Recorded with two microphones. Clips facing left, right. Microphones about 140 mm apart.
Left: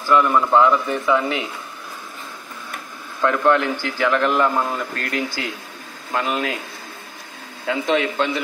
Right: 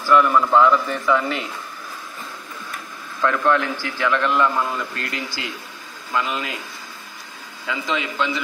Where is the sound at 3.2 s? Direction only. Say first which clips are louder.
Left 2 dB; 25° left (ahead or behind).